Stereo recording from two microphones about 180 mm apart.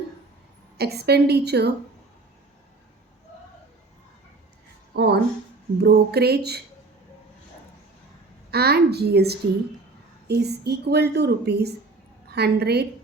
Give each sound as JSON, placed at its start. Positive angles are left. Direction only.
{"t": 0.8, "sound": "a woman's voice", "side_deg": -65}
{"t": 4.9, "sound": "a woman's voice", "side_deg": -65}
{"t": 8.4, "sound": "a woman's voice", "side_deg": -60}